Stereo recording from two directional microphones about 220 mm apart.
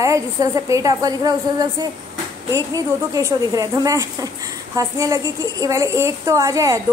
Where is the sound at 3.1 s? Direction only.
15° right (ahead or behind).